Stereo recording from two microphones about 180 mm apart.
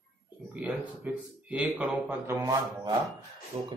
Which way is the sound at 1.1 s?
10° right (ahead or behind).